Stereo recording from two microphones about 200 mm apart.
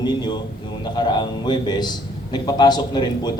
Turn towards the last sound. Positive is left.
turn(degrees=20)  # may be behind; listen again after turning